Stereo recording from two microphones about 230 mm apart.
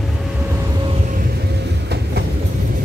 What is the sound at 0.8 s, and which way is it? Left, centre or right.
Train, right.